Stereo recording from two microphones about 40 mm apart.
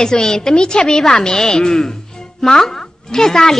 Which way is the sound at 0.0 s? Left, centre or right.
Centre.